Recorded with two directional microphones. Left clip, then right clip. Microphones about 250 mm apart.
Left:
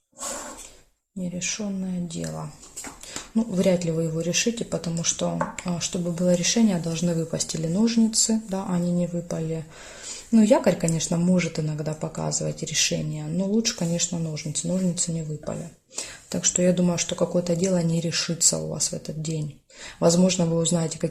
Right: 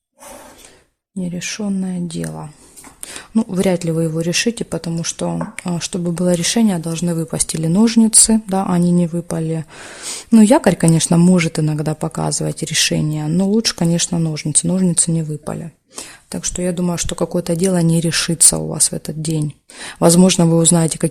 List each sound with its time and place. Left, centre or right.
1.4 s speech: right
16.0 s speech: right